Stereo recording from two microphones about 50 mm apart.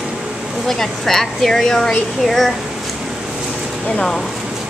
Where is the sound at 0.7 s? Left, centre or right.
Centre.